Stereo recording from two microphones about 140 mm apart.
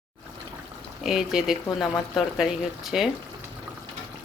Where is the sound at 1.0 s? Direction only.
5° right (ahead or behind).